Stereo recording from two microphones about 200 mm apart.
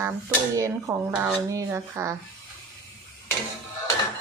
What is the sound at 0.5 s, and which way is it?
Speech, 15° right (ahead or behind).